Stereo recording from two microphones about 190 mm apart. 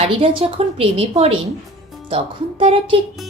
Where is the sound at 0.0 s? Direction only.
30° right (ahead or behind).